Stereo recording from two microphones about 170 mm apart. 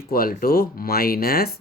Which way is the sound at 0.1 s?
60° left (ahead or behind).